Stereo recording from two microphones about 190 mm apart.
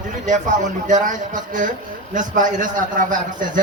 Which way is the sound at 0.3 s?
40° right (ahead or behind).